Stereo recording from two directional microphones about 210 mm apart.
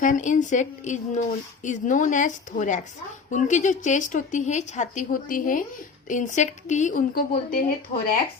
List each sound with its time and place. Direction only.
0.0 s speech: 35° left (ahead or behind)